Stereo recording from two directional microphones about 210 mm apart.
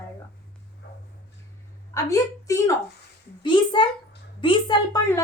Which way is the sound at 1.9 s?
15° left (ahead or behind).